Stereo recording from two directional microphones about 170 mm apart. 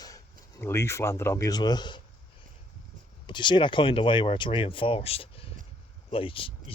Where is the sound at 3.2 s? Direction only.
30° left (ahead or behind).